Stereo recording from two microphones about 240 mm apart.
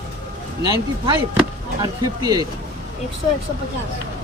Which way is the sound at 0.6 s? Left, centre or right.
Centre.